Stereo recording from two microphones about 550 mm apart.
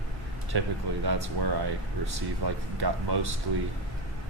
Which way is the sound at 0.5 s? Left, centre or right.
Right.